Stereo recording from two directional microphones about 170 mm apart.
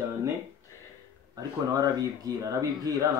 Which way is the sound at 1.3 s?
20° right (ahead or behind).